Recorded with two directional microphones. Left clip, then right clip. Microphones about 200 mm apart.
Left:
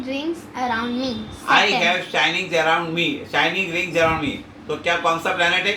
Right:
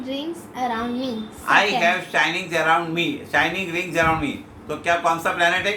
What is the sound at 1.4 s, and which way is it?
Speech, 10° right (ahead or behind).